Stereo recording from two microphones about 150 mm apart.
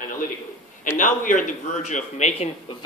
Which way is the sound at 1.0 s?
60° left (ahead or behind).